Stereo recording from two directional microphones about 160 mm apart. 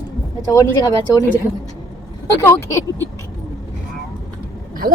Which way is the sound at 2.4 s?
15° left (ahead or behind).